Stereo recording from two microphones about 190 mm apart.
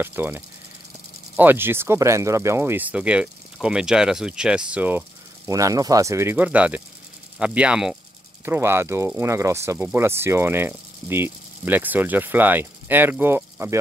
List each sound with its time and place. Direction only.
0.0 s speech: 10° right (ahead or behind)